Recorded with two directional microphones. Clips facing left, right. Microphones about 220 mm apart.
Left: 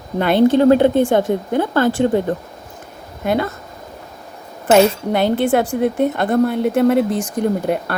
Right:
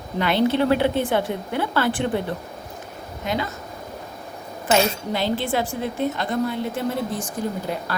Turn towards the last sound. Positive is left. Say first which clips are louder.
# left 8 dB
turn(degrees=55)  # may be behind; listen again after turning